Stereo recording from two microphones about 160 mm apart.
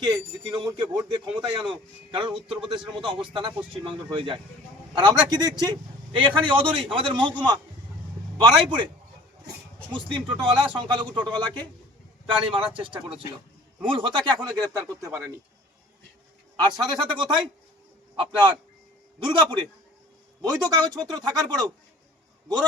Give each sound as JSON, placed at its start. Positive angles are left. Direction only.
{"t": 0.0, "sound": "a man's voice", "side_deg": -25}
{"t": 9.9, "sound": "a man's voice", "side_deg": -30}
{"t": 16.6, "sound": "a man's voice", "side_deg": -25}